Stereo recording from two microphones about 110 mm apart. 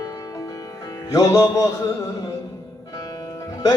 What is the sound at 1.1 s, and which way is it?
Music, 35° left (ahead or behind).